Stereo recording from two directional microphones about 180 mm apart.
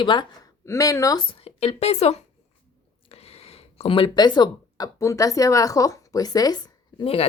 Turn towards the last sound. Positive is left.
turn(degrees=30)  # may be behind; listen again after turning